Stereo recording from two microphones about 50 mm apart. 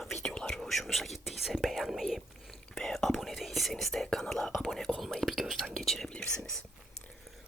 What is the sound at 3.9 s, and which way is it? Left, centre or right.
Speech, centre.